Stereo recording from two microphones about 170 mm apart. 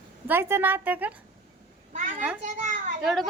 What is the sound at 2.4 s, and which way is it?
Speech, 50° right (ahead or behind).